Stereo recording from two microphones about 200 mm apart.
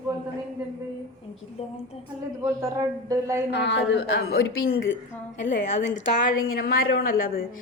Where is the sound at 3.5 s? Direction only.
60° left (ahead or behind).